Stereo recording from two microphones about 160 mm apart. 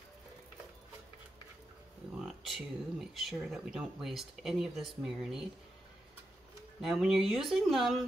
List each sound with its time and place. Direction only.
2.4 s speech: centre (ahead or behind)
6.8 s speech: 5° right (ahead or behind)